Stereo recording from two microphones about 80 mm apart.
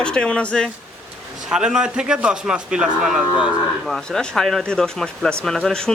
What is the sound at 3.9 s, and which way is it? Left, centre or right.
Speech, centre.